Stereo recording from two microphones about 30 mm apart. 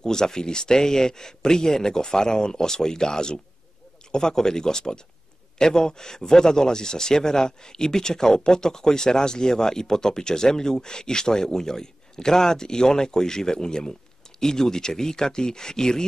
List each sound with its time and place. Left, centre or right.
0.0 s speech: left